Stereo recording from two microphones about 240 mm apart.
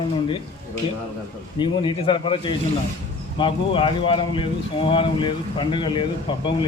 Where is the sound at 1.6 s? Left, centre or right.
Centre.